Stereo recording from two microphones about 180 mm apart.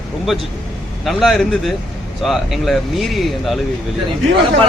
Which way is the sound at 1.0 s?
Centre (ahead or behind).